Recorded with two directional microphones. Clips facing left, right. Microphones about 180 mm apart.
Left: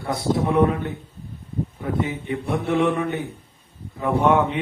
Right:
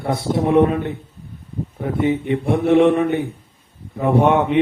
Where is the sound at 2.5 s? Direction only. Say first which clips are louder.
Right 7 dB; 25° right (ahead or behind).